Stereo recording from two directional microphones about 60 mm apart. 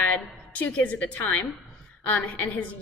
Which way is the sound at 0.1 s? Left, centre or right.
Left.